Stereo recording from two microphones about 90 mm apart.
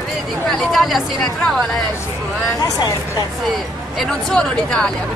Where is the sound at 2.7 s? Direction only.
45° left (ahead or behind).